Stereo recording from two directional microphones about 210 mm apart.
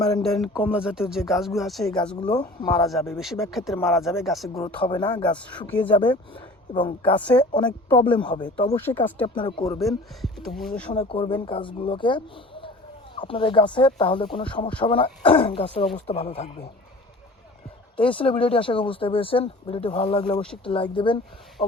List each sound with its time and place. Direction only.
0.0 s speech: 5° left (ahead or behind)
2.4 s speech: 20° left (ahead or behind)
3.1 s speech: centre (ahead or behind)
4.6 s speech: 20° left (ahead or behind)
5.2 s speech: 5° left (ahead or behind)
5.9 s speech: 20° left (ahead or behind)
8.8 s speech: 10° left (ahead or behind)
9.2 s speech: 20° left (ahead or behind)
9.8 s speech: centre (ahead or behind)
10.9 s speech: 25° left (ahead or behind)
17.9 s speech: 25° left (ahead or behind)